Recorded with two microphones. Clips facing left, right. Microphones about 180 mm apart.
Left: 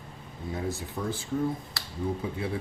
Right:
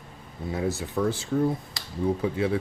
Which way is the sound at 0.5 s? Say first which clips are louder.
Right 6 dB; 80° right.